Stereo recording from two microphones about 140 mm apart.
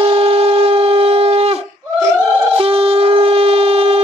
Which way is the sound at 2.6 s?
45° right (ahead or behind).